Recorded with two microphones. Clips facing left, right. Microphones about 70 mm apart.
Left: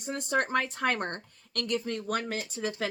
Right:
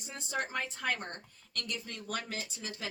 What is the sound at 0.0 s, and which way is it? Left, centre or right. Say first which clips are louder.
Speech: left 8 dB; left.